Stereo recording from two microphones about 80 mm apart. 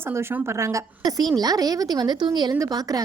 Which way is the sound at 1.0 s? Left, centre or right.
Right.